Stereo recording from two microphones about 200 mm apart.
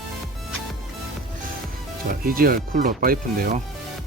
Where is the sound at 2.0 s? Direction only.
45° right (ahead or behind).